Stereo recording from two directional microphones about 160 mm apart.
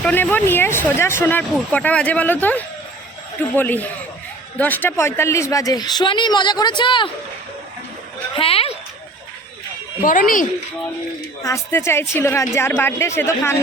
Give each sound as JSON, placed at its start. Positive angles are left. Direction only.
{"t": 0.0, "sound": "speech", "side_deg": 10}
{"t": 8.4, "sound": "a sound", "side_deg": 35}
{"t": 10.0, "sound": "speech", "side_deg": 60}
{"t": 11.4, "sound": "speech", "side_deg": 20}